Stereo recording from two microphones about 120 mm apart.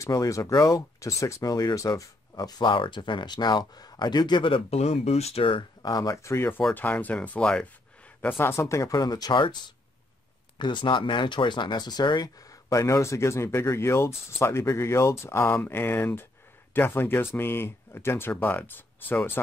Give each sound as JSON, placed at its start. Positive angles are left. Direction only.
{"t": 0.0, "sound": "speech", "side_deg": 25}
{"t": 5.8, "sound": "speech", "side_deg": 30}
{"t": 10.6, "sound": "speech", "side_deg": 40}